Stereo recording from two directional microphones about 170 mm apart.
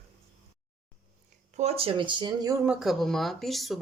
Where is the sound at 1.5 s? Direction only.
40° right (ahead or behind).